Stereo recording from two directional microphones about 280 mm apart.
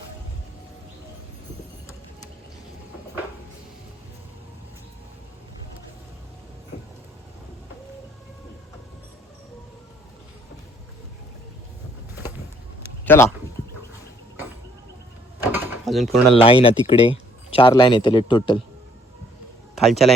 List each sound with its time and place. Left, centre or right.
13.1 s speech: centre
15.4 s mechanisms: centre
16.3 s speech: centre
19.7 s a man's voice: centre